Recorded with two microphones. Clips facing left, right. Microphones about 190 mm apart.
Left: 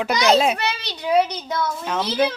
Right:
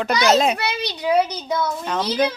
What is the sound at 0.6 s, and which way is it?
A child's voice, 10° right (ahead or behind).